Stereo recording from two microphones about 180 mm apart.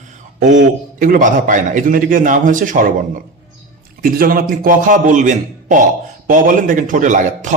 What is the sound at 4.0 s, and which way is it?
A man's voice, 50° right (ahead or behind).